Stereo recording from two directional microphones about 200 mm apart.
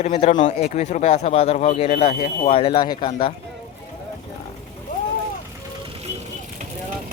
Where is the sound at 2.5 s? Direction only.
30° left (ahead or behind).